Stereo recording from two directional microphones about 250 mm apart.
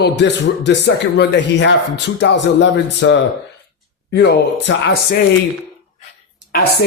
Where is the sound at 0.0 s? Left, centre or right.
Left.